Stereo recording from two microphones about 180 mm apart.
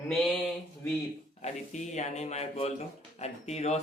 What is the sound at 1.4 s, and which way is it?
A man's voice, 40° left (ahead or behind).